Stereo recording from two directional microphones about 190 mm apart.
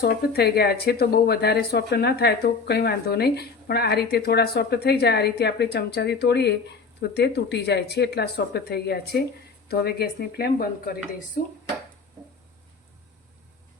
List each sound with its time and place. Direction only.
0.0 s speech: 55° left (ahead or behind)